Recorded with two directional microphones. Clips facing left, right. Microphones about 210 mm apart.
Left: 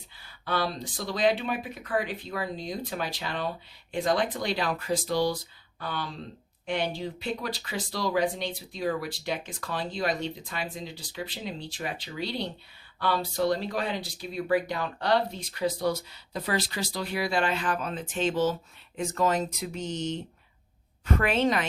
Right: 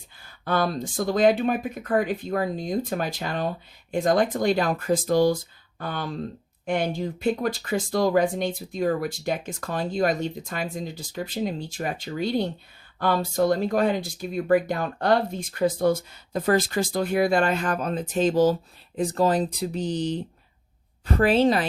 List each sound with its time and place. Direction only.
0.2 s speech: 50° right (ahead or behind)